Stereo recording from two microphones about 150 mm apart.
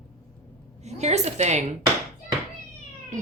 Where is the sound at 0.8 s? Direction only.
45° right (ahead or behind).